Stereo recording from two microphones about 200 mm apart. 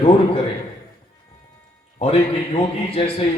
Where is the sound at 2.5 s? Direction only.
30° left (ahead or behind).